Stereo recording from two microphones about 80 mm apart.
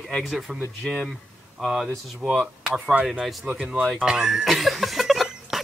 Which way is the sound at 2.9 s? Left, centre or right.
Centre.